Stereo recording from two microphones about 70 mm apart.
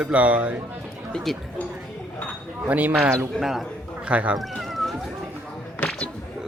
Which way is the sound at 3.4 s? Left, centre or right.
Centre.